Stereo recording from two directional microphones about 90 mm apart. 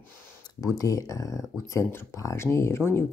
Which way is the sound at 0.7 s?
40° left (ahead or behind).